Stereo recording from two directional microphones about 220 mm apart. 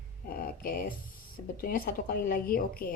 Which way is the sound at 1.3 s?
40° left (ahead or behind).